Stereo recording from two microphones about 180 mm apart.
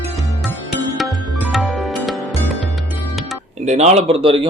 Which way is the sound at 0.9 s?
Centre (ahead or behind).